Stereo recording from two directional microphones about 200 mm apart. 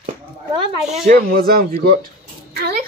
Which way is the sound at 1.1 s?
45° right (ahead or behind).